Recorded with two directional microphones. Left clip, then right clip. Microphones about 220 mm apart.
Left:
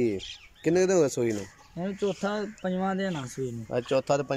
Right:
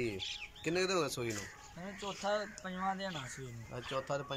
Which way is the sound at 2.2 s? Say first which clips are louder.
Left 5 dB; 55° left (ahead or behind).